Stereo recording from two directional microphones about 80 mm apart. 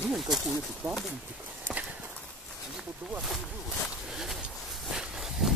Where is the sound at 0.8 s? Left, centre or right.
Right.